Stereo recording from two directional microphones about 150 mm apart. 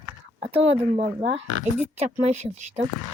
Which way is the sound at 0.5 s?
45° right (ahead or behind).